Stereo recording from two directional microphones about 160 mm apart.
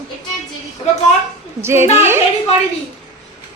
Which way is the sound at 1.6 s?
15° right (ahead or behind).